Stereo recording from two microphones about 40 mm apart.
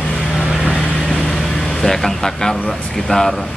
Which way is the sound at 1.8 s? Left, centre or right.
Centre.